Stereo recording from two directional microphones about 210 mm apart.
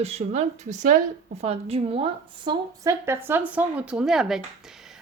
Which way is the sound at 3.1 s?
10° right (ahead or behind).